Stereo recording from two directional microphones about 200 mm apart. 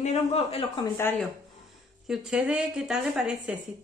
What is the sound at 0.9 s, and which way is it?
Speech, 10° left (ahead or behind).